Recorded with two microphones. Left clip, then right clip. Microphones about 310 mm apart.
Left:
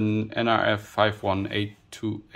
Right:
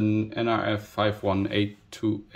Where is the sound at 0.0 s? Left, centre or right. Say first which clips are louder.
Even; centre.